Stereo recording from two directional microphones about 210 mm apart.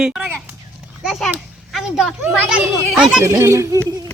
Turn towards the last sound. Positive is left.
turn(degrees=-20)  # may be behind; listen again after turning